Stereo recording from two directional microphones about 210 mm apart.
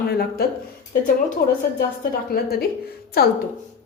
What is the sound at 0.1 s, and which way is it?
A woman's voice, 50° left (ahead or behind).